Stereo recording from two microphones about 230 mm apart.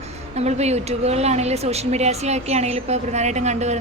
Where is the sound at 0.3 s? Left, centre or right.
Right.